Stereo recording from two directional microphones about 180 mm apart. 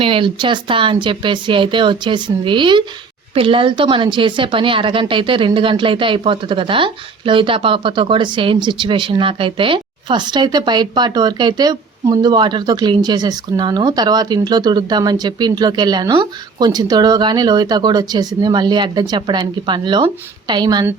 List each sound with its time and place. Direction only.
0.0 s a woman's voice: 30° right (ahead or behind)